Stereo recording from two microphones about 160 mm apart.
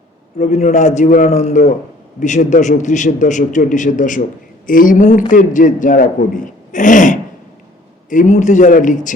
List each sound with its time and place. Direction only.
0.3 s a man's voice: 45° left (ahead or behind)